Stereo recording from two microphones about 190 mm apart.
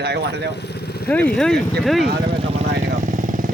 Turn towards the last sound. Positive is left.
turn(degrees=-45)  # may be behind; listen again after turning